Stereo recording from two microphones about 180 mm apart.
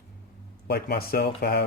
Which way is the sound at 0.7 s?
65° left (ahead or behind).